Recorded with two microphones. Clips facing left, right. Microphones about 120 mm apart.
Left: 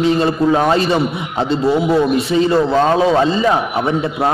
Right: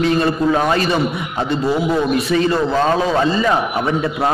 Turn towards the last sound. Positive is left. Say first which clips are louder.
# left 2 dB
turn(degrees=20)  # may be behind; listen again after turning